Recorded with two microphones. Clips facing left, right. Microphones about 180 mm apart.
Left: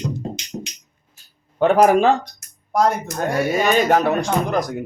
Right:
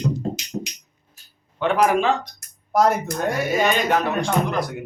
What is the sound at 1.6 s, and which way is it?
Speech, 40° left (ahead or behind).